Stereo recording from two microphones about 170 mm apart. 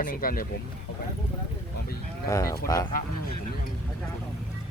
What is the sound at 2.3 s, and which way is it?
Speech, 20° left (ahead or behind).